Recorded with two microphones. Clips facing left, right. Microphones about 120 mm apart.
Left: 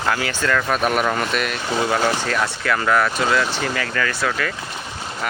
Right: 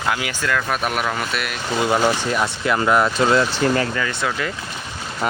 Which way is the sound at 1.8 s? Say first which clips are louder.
Right 2 dB; 15° right (ahead or behind).